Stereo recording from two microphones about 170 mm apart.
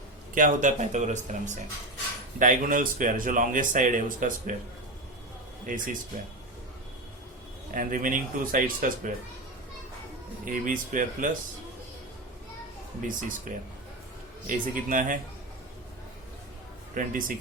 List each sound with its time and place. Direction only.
0.3 s speech: 50° right (ahead or behind)
5.6 s speech: 50° right (ahead or behind)
7.7 s speech: 50° right (ahead or behind)
10.4 s speech: 50° right (ahead or behind)
13.0 s speech: 50° right (ahead or behind)
16.9 s speech: 55° right (ahead or behind)